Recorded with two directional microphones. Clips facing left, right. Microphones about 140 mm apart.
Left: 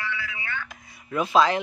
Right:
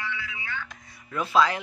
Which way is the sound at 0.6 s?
15° left (ahead or behind).